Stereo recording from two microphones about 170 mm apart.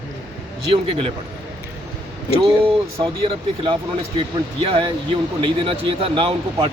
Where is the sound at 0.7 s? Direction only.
35° right (ahead or behind).